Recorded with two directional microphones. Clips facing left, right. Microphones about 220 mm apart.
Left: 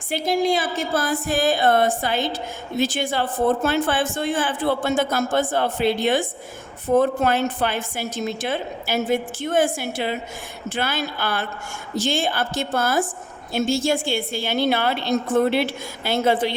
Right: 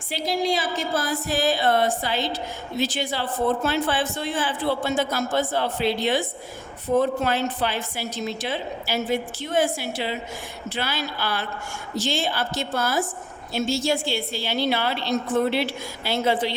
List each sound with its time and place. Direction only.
0.1 s a woman's voice: 50° left (ahead or behind)